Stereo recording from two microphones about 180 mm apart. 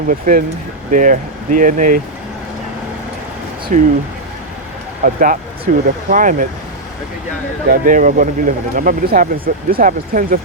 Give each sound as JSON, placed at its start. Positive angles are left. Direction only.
{"t": 0.1, "sound": "speech", "side_deg": -50}
{"t": 3.7, "sound": "speech", "side_deg": -45}
{"t": 5.0, "sound": "speech", "side_deg": -50}
{"t": 7.7, "sound": "speech", "side_deg": -50}